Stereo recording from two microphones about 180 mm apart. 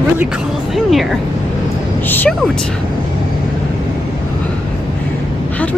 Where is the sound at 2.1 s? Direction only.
10° left (ahead or behind).